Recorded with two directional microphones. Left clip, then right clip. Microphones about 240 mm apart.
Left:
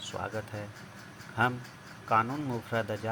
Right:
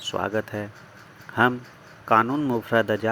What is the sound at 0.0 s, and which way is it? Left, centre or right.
Speech, right.